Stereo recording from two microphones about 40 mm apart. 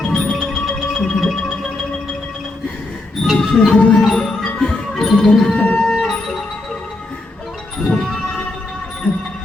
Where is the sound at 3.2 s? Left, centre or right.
Centre.